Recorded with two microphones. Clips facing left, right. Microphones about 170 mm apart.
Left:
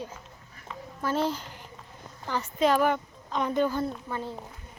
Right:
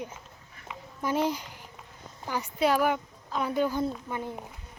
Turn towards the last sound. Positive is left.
turn(degrees=-15)  # may be behind; listen again after turning